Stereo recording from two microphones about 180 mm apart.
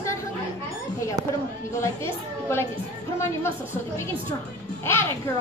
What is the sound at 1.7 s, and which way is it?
Speech, 15° left (ahead or behind).